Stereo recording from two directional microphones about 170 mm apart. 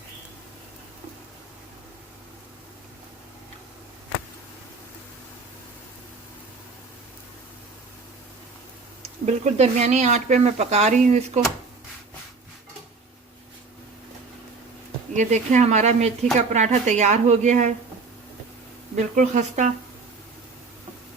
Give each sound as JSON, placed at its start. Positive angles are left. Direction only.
{"t": 9.2, "sound": "speech", "side_deg": -45}
{"t": 15.1, "sound": "speech", "side_deg": -45}
{"t": 18.9, "sound": "speech", "side_deg": -45}